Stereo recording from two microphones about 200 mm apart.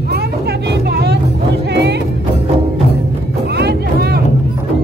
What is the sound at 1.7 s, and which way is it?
Music, 60° right (ahead or behind).